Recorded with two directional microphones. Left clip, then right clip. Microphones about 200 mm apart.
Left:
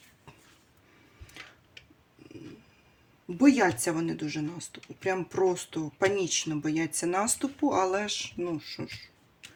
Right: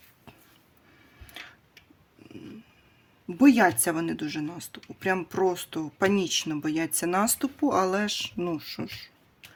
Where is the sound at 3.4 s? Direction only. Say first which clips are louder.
Right 3 dB; 45° right (ahead or behind).